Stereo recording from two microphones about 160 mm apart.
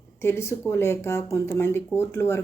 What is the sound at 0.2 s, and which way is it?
Speech, 15° left (ahead or behind).